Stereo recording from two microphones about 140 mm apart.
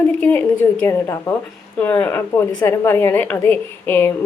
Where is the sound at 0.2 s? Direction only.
10° left (ahead or behind).